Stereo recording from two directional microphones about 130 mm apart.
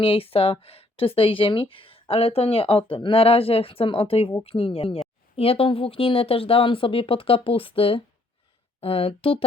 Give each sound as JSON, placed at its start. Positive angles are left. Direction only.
{"t": 0.0, "sound": "speech", "side_deg": 45}